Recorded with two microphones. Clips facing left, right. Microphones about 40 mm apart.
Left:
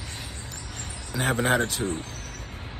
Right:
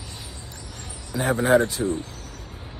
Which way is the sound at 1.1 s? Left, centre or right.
Left.